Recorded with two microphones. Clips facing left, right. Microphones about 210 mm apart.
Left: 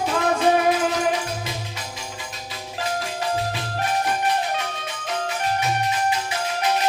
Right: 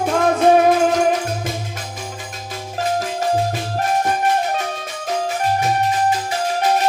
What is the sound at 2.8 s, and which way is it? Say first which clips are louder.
Music: right 6 dB; 45° right (ahead or behind).